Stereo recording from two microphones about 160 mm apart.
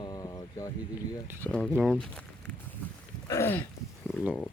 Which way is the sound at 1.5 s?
10° left (ahead or behind).